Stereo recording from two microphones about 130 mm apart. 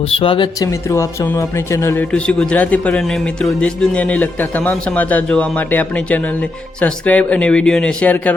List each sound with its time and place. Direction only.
0.1 s speech: 40° left (ahead or behind)
0.9 s speech: 25° left (ahead or behind)
2.1 s a man's voice: 10° left (ahead or behind)